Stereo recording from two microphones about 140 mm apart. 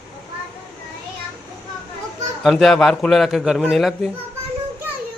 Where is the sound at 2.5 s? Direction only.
Centre (ahead or behind).